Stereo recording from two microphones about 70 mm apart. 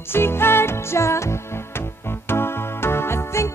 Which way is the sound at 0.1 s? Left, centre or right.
Left.